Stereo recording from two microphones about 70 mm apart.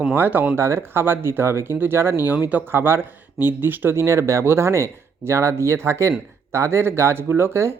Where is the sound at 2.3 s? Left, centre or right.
Right.